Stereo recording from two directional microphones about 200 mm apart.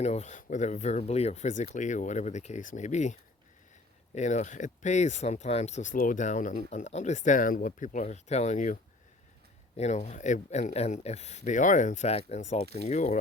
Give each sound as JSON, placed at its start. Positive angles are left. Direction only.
{"t": 0.0, "sound": "speech", "side_deg": 35}